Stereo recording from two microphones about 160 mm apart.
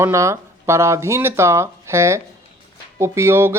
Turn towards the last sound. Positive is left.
turn(degrees=-15)  # may be behind; listen again after turning